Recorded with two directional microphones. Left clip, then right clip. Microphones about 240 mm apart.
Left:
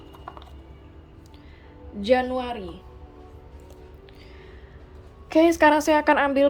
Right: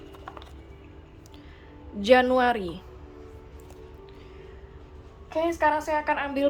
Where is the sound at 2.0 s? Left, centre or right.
Centre.